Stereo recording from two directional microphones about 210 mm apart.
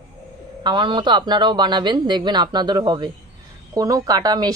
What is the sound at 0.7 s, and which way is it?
Speech, 20° right (ahead or behind).